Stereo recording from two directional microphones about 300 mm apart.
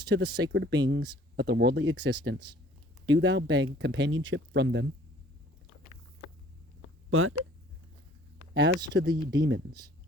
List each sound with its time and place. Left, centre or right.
0.1 s speech: right
7.1 s speech: right
8.5 s speech: right